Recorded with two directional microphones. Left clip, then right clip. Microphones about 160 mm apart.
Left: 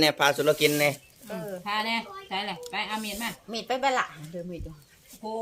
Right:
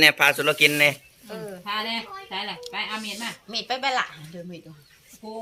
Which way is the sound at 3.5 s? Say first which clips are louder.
Right 1 dB; 75° left (ahead or behind).